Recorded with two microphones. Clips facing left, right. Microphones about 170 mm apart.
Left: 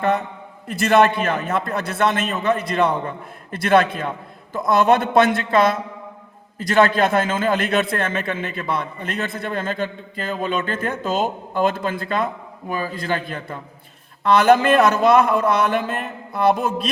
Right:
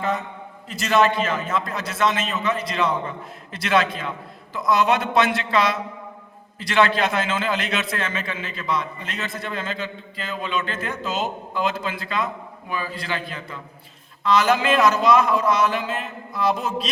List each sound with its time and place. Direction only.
0.7 s a man's voice: 55° left (ahead or behind)